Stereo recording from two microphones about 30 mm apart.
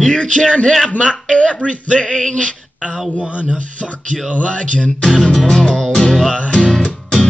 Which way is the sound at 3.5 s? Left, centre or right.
Left.